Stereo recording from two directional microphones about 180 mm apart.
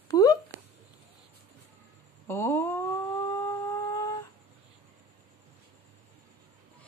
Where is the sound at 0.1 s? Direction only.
20° left (ahead or behind).